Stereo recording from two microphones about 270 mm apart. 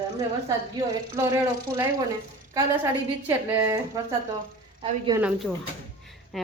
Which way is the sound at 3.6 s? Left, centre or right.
Centre.